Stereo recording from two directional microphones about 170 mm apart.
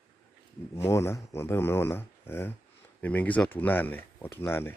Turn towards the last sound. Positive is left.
turn(degrees=15)  # may be behind; listen again after turning